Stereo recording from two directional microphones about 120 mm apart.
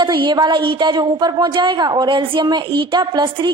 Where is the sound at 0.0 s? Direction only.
40° right (ahead or behind).